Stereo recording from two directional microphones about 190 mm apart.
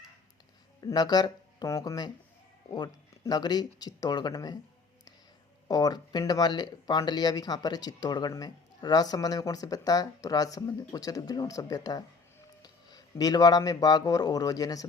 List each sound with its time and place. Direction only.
0.8 s speech: 20° left (ahead or behind)
5.6 s speech: 20° left (ahead or behind)